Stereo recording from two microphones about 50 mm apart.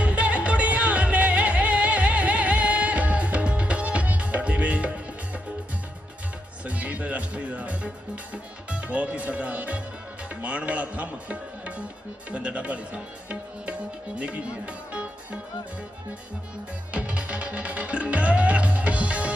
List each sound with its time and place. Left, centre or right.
0.0 s music: right
6.7 s music: right
10.2 s speech: right
12.3 s music: right
14.2 s speech: right
16.9 s music: right